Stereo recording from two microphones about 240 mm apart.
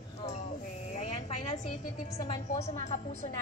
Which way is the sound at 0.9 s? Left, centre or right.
Left.